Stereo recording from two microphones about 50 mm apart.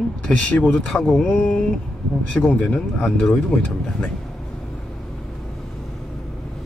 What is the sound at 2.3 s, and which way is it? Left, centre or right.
Speech, left.